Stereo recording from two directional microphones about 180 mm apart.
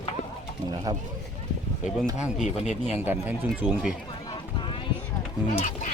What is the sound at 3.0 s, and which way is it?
Speech, 10° right (ahead or behind).